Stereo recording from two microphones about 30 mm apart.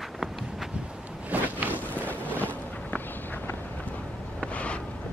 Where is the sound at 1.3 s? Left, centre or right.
Right.